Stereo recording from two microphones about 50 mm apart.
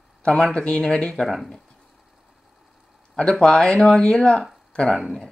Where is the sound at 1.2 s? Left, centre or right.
Centre.